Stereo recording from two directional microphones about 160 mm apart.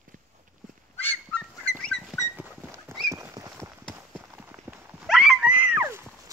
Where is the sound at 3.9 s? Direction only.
15° right (ahead or behind).